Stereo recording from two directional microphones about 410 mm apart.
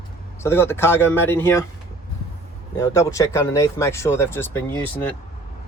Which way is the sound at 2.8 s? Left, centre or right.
Centre.